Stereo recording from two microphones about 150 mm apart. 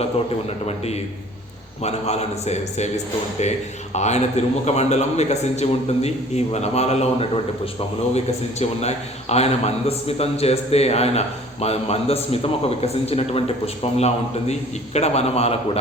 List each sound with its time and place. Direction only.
0.0 s a man's voice: 45° left (ahead or behind)